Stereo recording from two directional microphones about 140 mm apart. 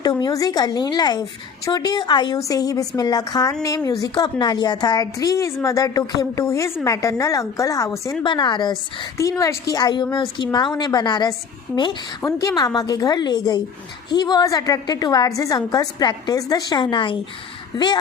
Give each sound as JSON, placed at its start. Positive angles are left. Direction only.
{"t": 0.0, "sound": "a woman's voice", "side_deg": 30}
{"t": 8.2, "sound": "a woman's voice", "side_deg": 35}